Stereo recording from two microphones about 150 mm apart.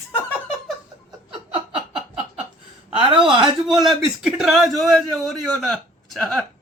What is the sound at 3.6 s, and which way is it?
A man's voice, centre (ahead or behind).